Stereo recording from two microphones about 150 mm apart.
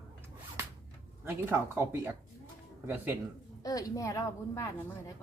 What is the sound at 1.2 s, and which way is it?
Speech, 15° right (ahead or behind).